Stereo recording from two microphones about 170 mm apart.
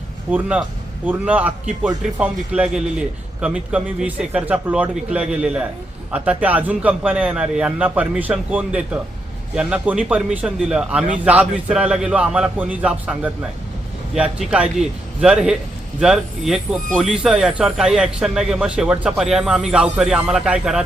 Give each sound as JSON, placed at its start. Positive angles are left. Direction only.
{"t": 0.3, "sound": "a man's voice", "side_deg": -10}